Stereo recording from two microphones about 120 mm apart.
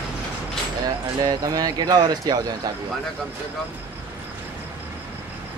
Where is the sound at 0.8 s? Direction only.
30° right (ahead or behind).